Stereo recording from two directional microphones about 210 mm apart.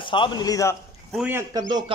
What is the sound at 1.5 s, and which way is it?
Speech, 20° right (ahead or behind).